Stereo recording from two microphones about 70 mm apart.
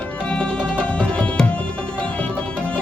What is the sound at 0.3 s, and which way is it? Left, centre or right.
Music, centre.